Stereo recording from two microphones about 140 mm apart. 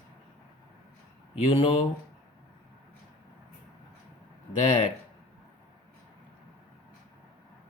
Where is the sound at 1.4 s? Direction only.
45° left (ahead or behind).